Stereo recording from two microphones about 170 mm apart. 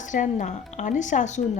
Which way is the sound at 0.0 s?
45° left (ahead or behind).